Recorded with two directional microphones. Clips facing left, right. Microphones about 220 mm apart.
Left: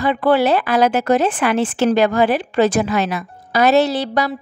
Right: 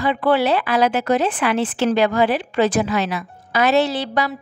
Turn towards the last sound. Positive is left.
turn(degrees=40)  # may be behind; listen again after turning